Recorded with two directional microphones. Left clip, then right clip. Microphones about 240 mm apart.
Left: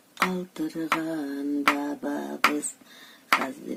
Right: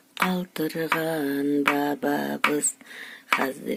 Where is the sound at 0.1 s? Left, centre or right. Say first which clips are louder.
Right 1 dB; right.